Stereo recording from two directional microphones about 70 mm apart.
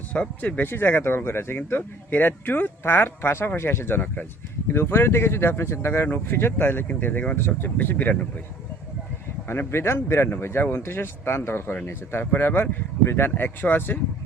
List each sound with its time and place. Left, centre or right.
0.1 s speech: left
4.7 s speech: left
9.5 s speech: left